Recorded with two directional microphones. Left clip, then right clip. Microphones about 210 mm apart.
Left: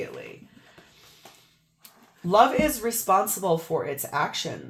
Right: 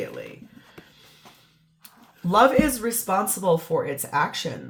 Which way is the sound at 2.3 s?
30° left (ahead or behind).